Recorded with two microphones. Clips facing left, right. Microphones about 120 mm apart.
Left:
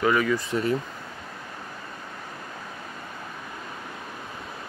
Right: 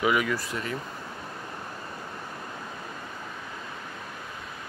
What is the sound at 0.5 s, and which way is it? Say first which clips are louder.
Speech: left 8 dB; 35° left (ahead or behind).